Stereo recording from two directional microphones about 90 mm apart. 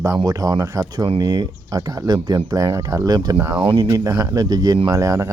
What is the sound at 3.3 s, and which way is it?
Speech, 30° right (ahead or behind).